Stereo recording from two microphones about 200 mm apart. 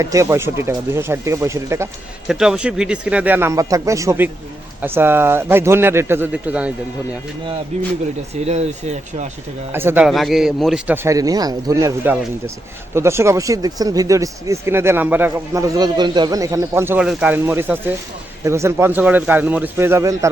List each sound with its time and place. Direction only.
0.0 s speech: 15° right (ahead or behind)
2.2 s speech: 5° right (ahead or behind)
8.4 s speech: 35° right (ahead or behind)
9.7 s speech: 10° right (ahead or behind)